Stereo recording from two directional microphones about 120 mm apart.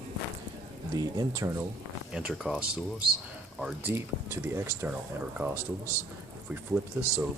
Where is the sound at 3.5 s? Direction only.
15° right (ahead or behind).